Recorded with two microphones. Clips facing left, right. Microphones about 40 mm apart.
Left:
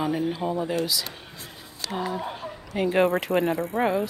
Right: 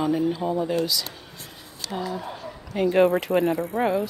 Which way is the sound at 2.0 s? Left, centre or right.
Left.